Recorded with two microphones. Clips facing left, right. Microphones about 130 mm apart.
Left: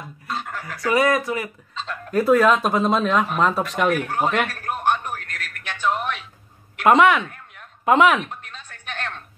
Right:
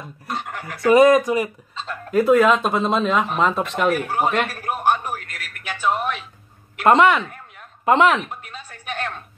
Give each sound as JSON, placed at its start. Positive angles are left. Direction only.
{"t": 0.7, "sound": "speech", "side_deg": -20}
{"t": 2.8, "sound": "speech", "side_deg": 10}
{"t": 3.1, "sound": "speech", "side_deg": -5}
{"t": 4.5, "sound": "a sound", "side_deg": -10}